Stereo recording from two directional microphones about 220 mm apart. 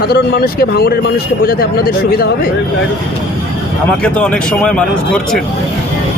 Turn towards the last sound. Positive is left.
turn(degrees=5)  # may be behind; listen again after turning